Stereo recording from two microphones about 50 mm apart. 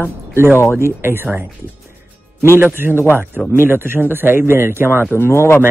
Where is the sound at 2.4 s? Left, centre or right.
Right.